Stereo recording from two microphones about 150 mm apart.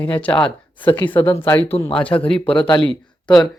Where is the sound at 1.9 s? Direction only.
10° left (ahead or behind).